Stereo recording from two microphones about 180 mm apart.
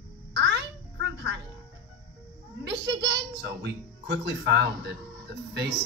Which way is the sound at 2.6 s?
70° right (ahead or behind).